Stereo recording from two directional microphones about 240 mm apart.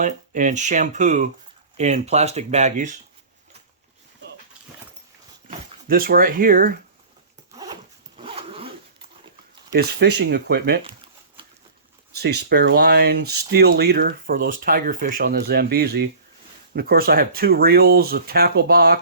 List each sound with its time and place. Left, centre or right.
0.0 s speech: right
5.5 s speech: right
8.2 s zipper: right
9.7 s speech: right
12.1 s speech: right